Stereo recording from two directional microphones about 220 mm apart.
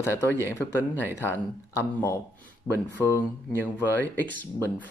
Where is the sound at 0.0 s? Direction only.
10° left (ahead or behind).